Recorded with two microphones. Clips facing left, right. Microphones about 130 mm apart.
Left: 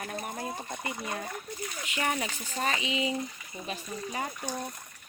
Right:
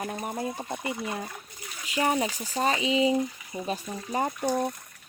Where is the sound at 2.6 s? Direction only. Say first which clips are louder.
Right 6 dB; 30° right (ahead or behind).